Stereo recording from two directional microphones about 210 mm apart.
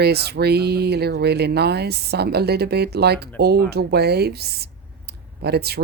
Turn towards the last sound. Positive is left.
turn(degrees=-50)  # may be behind; listen again after turning